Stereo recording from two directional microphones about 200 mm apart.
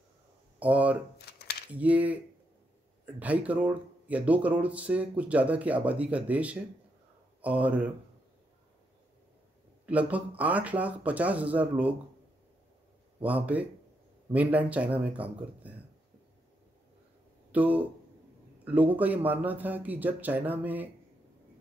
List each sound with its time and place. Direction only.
0.6 s speech: 5° right (ahead or behind)
1.3 s a sound: 55° left (ahead or behind)
1.7 s speech: 5° right (ahead or behind)
3.2 s speech: 5° right (ahead or behind)
9.8 s speech: 5° right (ahead or behind)
13.2 s speech: 5° right (ahead or behind)
17.5 s speech: 5° right (ahead or behind)